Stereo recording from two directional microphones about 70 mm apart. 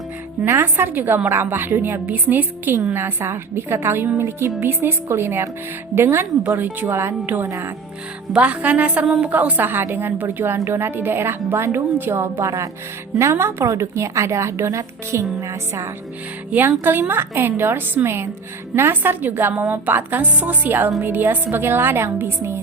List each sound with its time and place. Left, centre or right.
0.4 s a woman's voice: right
0.9 s a woman's voice: right
8.3 s a woman's voice: centre; by 15.9 s right
16.5 s a woman's voice: right